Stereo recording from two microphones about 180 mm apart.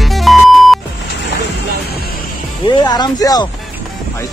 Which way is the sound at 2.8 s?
20° left (ahead or behind).